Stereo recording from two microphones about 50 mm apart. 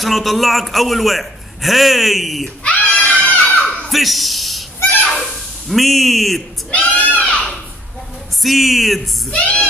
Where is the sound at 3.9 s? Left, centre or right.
Centre.